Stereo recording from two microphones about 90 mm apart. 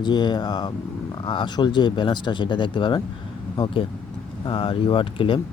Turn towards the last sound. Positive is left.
turn(degrees=75)  # may be behind; listen again after turning